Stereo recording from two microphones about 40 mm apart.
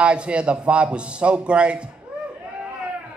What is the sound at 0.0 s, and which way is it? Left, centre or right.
A man's voice, right.